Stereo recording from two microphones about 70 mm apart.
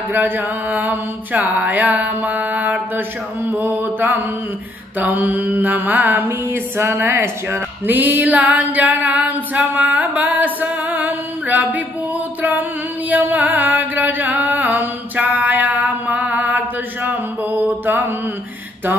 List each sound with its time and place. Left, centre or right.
0.1 s mantra: right
12.4 s a sound: right
13.1 s chant: right